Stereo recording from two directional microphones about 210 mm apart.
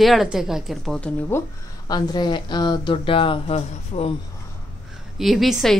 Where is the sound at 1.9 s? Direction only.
20° left (ahead or behind).